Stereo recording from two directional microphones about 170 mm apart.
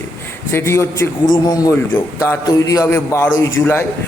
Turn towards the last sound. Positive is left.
turn(degrees=15)  # may be behind; listen again after turning